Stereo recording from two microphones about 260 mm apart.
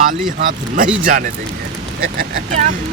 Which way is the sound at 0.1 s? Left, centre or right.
Right.